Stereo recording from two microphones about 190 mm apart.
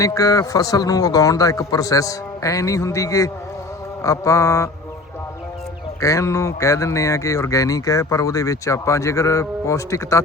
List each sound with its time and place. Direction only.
0.0 s speech: 15° left (ahead or behind)
6.0 s speech: 15° left (ahead or behind)